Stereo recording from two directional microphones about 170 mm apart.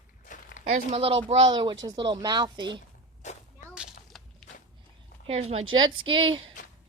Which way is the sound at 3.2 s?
45° left (ahead or behind).